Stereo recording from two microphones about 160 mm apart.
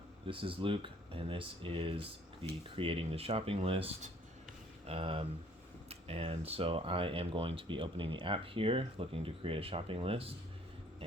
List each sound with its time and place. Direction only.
0.3 s speech: 35° right (ahead or behind)